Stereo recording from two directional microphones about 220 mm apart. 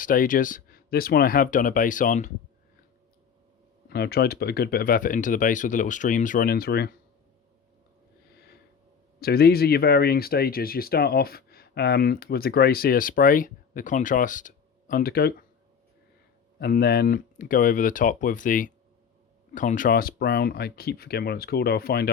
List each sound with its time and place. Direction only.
0.0 s speech: 40° left (ahead or behind)
3.8 s speech: 45° left (ahead or behind)
9.2 s speech: 45° left (ahead or behind)
16.6 s speech: 45° left (ahead or behind)